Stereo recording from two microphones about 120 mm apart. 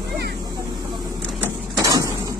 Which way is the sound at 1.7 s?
30° right (ahead or behind).